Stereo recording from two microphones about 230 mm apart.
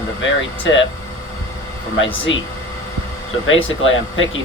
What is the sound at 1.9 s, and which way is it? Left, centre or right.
Speech, left.